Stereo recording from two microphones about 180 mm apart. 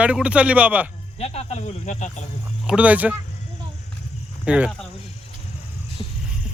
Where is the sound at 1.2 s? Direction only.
35° left (ahead or behind).